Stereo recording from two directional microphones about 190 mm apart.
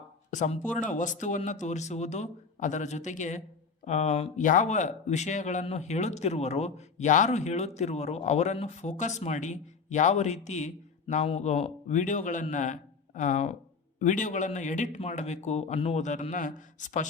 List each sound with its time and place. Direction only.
0.3 s speech: 40° left (ahead or behind)